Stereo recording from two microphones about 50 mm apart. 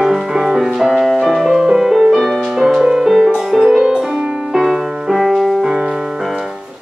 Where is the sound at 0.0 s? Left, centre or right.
Centre.